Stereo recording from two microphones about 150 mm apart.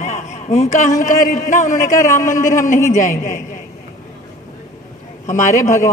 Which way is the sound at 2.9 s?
60° left (ahead or behind).